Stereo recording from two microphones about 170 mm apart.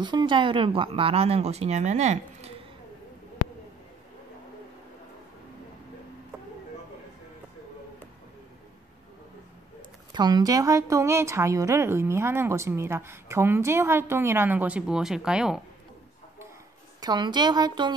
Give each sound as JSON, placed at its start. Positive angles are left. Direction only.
{"t": 0.0, "sound": "speech", "side_deg": -25}
{"t": 9.8, "sound": "speech", "side_deg": -25}
{"t": 17.0, "sound": "a woman's voice", "side_deg": -25}